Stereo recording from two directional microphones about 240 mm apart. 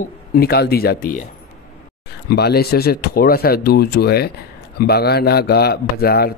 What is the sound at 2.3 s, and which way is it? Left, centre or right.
Speech, left.